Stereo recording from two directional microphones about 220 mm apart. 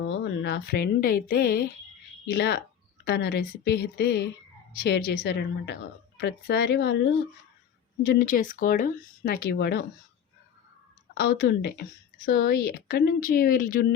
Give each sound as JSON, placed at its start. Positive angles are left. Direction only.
{"t": 0.0, "sound": "speech", "side_deg": 55}
{"t": 11.1, "sound": "speech", "side_deg": 45}